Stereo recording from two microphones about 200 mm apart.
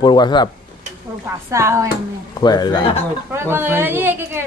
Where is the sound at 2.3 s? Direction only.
20° left (ahead or behind).